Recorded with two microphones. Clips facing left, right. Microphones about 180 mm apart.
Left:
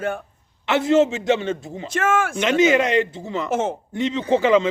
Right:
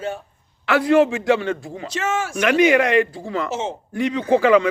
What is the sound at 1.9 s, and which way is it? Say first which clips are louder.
Speech: left 3 dB; 50° left (ahead or behind).